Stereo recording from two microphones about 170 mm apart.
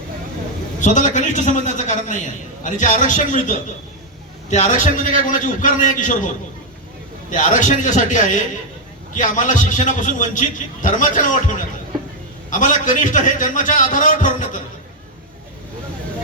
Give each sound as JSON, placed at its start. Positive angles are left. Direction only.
{"t": 0.8, "sound": "a man's voice", "side_deg": 45}